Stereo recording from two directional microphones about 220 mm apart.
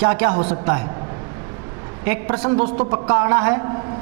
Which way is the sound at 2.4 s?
30° right (ahead or behind).